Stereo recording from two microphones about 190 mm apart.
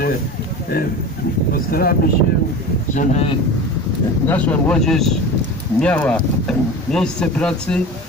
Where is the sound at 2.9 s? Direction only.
40° left (ahead or behind).